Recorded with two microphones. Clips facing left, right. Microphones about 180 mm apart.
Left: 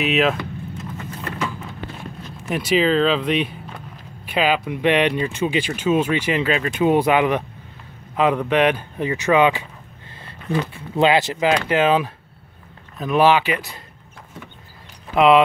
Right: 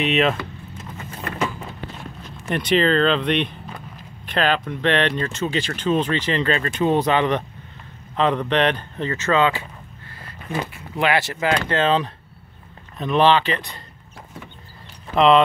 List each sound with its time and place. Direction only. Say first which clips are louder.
0.0 s speech: even; centre (ahead or behind)
2.5 s speech: even; 5° left (ahead or behind)
10.7 s speech: left 4 dB; 20° left (ahead or behind); by 13.8 s 5° left (ahead or behind)
15.1 s speech: left 1 dB; 5° left (ahead or behind)